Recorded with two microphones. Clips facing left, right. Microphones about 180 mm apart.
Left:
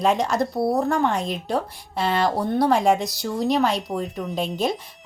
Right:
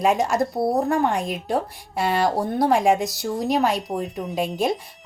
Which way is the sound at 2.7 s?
Centre (ahead or behind).